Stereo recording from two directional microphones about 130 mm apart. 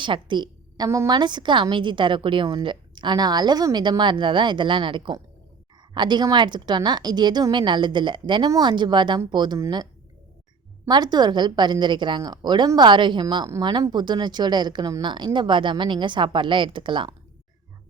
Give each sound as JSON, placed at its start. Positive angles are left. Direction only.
{"t": 0.0, "sound": "a woman's voice", "side_deg": -35}
{"t": 10.8, "sound": "a woman's voice", "side_deg": -35}